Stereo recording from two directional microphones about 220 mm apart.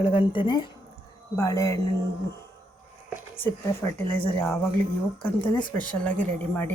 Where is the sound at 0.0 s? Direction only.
25° left (ahead or behind).